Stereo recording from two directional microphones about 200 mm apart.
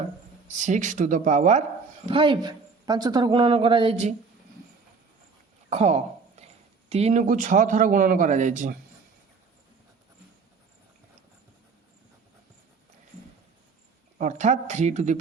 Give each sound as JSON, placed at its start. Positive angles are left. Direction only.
{"t": 0.4, "sound": "speech", "side_deg": -40}
{"t": 2.0, "sound": "speech", "side_deg": -25}
{"t": 5.6, "sound": "speech", "side_deg": -35}
{"t": 14.2, "sound": "speech", "side_deg": -35}